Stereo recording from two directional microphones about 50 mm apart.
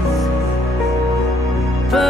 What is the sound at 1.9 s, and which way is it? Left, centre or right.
Music, centre.